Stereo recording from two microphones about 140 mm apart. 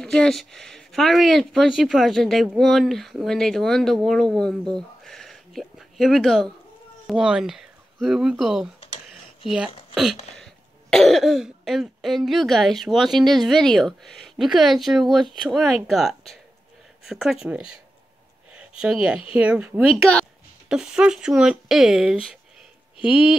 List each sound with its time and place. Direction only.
0.0 s speech: 5° left (ahead or behind)
4.7 s a sound: centre (ahead or behind)
7.1 s speech: 5° right (ahead or behind)
8.8 s computer keyboard: 45° left (ahead or behind)
10.3 s speech: centre (ahead or behind)
18.8 s speech: 5° right (ahead or behind)
19.9 s speech: 5° left (ahead or behind)
20.6 s speech: 5° right (ahead or behind)